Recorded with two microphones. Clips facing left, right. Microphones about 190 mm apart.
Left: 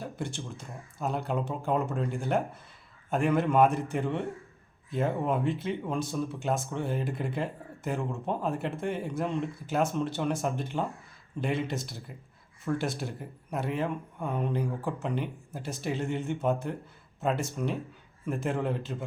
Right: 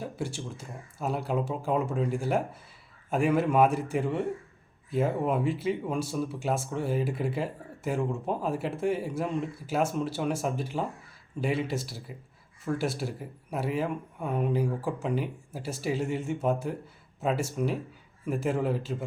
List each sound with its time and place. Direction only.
0.0 s a man's voice: 5° right (ahead or behind)